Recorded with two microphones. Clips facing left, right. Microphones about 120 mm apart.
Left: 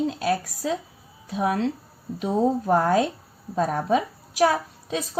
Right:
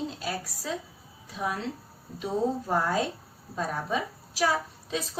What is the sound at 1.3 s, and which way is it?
Speech, 70° left (ahead or behind).